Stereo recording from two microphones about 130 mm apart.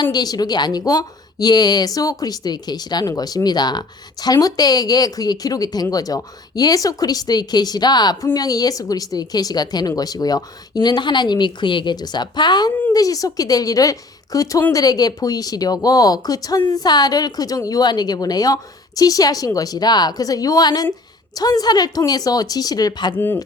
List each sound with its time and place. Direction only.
0.0 s a woman's voice: 30° left (ahead or behind)
23.1 s speech: 15° left (ahead or behind)